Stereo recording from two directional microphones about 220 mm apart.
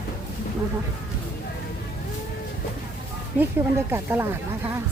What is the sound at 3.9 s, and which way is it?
Speech, 10° right (ahead or behind).